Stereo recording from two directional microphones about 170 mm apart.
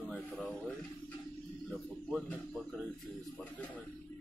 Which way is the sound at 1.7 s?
5° left (ahead or behind).